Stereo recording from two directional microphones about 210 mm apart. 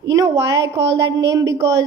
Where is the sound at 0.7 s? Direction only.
55° right (ahead or behind).